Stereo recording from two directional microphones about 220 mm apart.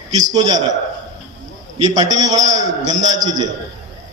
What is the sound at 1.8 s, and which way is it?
A man's voice, 15° right (ahead or behind).